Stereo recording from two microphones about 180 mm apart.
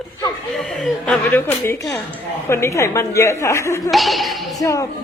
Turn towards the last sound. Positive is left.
turn(degrees=20)  # may be behind; listen again after turning